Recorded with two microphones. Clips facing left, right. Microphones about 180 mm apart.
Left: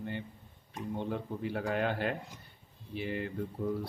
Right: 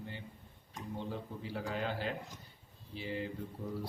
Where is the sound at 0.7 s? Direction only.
60° left (ahead or behind).